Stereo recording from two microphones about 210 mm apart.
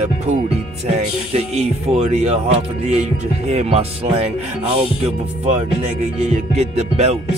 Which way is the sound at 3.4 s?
30° right (ahead or behind).